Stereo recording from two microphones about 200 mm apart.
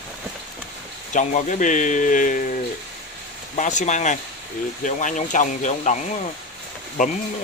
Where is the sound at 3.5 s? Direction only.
35° left (ahead or behind).